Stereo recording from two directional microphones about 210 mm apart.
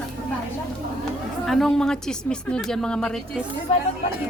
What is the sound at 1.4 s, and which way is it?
A woman's voice, centre (ahead or behind).